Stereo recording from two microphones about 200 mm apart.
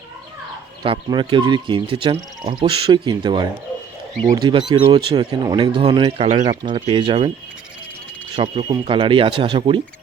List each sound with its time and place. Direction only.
0.8 s speech: 20° right (ahead or behind)
6.7 s speech: 25° right (ahead or behind)
8.4 s speech: 25° right (ahead or behind)